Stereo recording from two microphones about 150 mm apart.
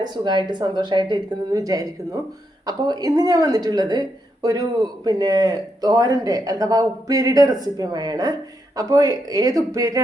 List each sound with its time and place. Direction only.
0.0 s a man's voice: 30° right (ahead or behind)